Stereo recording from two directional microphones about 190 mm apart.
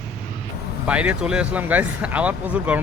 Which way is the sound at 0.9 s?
5° right (ahead or behind).